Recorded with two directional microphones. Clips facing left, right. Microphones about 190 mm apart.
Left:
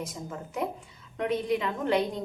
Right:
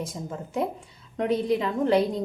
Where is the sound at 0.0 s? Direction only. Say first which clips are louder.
Right 3 dB; 30° right (ahead or behind).